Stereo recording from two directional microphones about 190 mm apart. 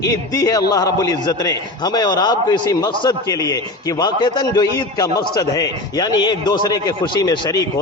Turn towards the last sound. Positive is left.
turn(degrees=20)  # may be behind; listen again after turning